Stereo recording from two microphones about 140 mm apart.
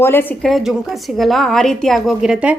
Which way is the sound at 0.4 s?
Centre (ahead or behind).